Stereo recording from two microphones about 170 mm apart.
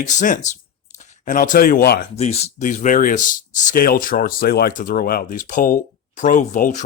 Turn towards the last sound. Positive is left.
turn(degrees=50)  # may be behind; listen again after turning